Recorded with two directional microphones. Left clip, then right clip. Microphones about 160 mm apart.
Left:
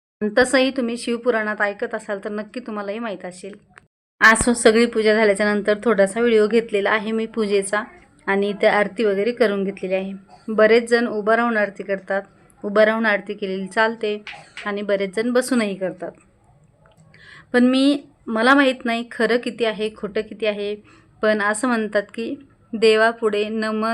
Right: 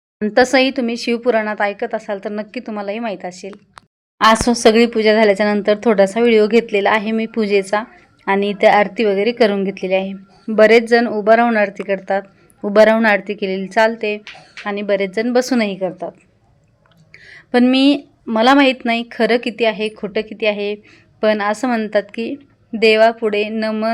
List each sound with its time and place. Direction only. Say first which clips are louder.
0.2 s speech: right 4 dB; 15° right (ahead or behind)
4.6 s speech: right 3 dB; 20° right (ahead or behind)